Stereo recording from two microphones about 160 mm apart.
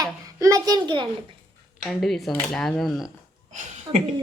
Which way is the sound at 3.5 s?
40° right (ahead or behind).